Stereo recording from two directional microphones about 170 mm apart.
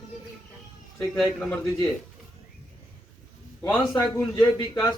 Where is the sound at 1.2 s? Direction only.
Centre (ahead or behind).